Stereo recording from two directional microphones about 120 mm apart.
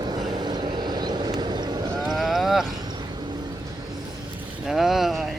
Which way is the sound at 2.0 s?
5° right (ahead or behind).